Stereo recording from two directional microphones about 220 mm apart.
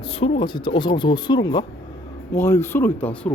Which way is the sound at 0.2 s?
20° left (ahead or behind).